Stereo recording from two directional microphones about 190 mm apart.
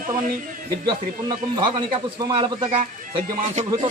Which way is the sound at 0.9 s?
25° right (ahead or behind).